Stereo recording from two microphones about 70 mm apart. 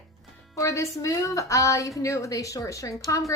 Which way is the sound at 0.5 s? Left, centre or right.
Left.